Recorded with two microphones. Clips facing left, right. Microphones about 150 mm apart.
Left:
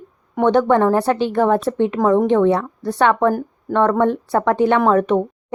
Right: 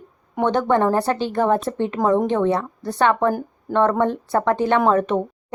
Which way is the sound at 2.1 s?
15° right (ahead or behind).